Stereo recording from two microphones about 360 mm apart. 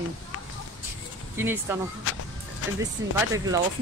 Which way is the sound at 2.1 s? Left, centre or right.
Left.